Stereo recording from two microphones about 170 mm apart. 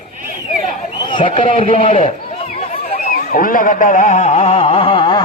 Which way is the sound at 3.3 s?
55° left (ahead or behind).